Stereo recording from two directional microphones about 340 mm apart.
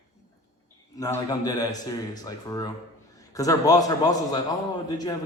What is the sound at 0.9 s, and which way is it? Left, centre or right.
A man's voice, centre.